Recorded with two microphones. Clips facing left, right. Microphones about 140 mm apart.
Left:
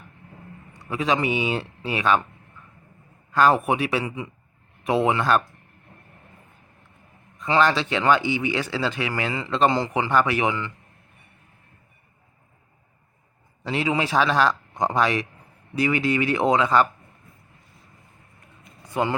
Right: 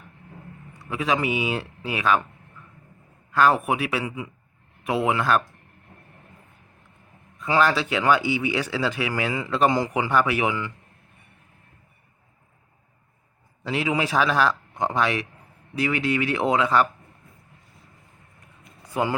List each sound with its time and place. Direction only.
0.7 s speech: 5° right (ahead or behind)
3.3 s speech: centre (ahead or behind)
7.3 s a man's voice: 5° right (ahead or behind)
13.7 s speech: 5° right (ahead or behind)